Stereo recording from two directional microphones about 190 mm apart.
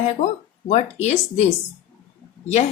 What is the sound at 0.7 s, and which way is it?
Speech, 35° left (ahead or behind).